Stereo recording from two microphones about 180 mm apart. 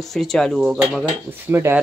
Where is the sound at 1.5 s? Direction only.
15° right (ahead or behind).